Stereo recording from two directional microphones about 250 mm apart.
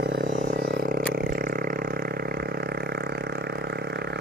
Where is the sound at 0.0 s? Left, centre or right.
Right.